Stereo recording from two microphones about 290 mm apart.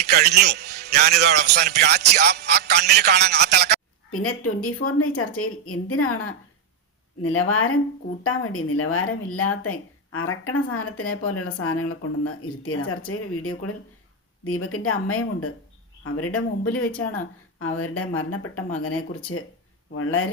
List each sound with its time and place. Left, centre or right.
0.0 s a man's voice: right
4.1 s speech: left
7.2 s speech: left
17.6 s speech: left